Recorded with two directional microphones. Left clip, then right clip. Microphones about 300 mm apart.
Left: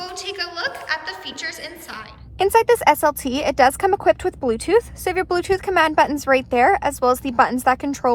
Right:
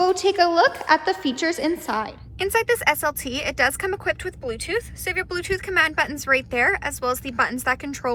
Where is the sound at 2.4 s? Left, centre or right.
Centre.